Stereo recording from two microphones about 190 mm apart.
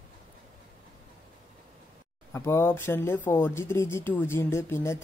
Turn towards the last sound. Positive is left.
turn(degrees=15)  # may be behind; listen again after turning